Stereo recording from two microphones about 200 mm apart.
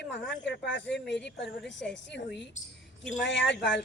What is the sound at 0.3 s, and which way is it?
Speech, 60° left (ahead or behind).